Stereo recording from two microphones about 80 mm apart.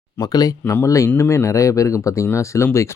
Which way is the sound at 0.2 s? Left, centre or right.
Left.